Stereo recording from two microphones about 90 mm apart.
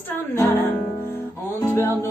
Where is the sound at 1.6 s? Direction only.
25° left (ahead or behind).